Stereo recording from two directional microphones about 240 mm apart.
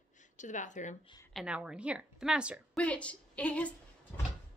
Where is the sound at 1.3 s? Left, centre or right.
Centre.